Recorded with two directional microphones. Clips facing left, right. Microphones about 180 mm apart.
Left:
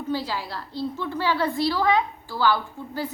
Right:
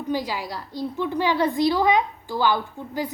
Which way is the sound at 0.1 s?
15° right (ahead or behind).